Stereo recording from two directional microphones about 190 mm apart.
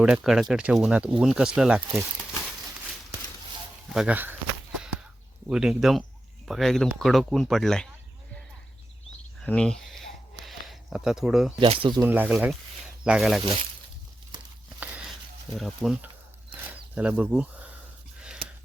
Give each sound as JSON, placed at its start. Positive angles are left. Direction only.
{"t": 0.0, "sound": "speech", "side_deg": -5}
{"t": 3.9, "sound": "speech", "side_deg": -5}
{"t": 5.5, "sound": "speech", "side_deg": -5}
{"t": 9.4, "sound": "a sound", "side_deg": 5}
{"t": 11.6, "sound": "speech", "side_deg": -30}
{"t": 12.0, "sound": "speech", "side_deg": -10}
{"t": 14.8, "sound": "a sound", "side_deg": -5}
{"t": 15.5, "sound": "speech", "side_deg": 0}